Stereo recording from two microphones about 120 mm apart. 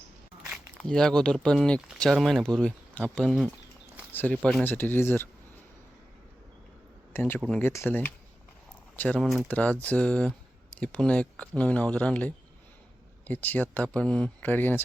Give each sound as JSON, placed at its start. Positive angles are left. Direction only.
{"t": 0.8, "sound": "speech", "side_deg": 5}
{"t": 4.1, "sound": "speech", "side_deg": 15}
{"t": 7.1, "sound": "speech", "side_deg": 15}